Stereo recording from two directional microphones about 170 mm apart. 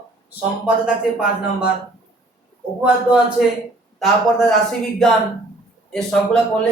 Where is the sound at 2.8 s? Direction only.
5° right (ahead or behind).